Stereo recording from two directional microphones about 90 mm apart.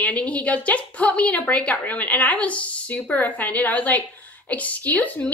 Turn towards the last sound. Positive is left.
turn(degrees=15)  # may be behind; listen again after turning